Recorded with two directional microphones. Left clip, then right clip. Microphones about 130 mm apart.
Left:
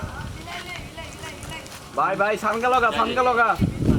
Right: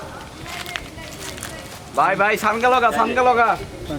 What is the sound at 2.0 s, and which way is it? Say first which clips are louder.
Speech: right 4 dB; 20° right (ahead or behind).